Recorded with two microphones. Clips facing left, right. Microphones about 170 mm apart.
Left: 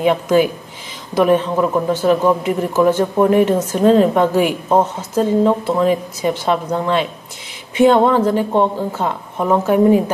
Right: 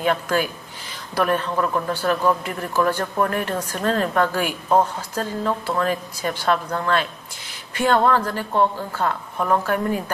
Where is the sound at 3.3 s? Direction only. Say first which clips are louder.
Left 12 dB; 5° left (ahead or behind).